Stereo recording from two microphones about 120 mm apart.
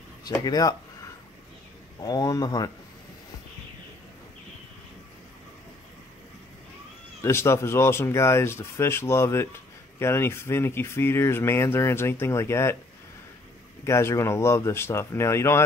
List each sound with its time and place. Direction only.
0.3 s speech: 30° left (ahead or behind)
2.0 s speech: 35° left (ahead or behind)
7.2 s speech: 20° left (ahead or behind)
13.8 s speech: 20° left (ahead or behind)